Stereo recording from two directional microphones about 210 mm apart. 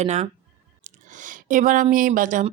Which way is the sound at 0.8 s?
35° right (ahead or behind).